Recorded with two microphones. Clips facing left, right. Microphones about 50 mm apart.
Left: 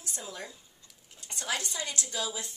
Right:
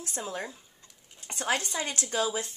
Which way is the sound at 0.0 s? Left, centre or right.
Right.